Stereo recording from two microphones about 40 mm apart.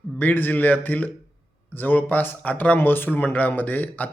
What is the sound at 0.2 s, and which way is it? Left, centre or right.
Speech, left.